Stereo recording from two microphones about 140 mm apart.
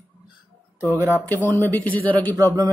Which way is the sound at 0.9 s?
20° right (ahead or behind).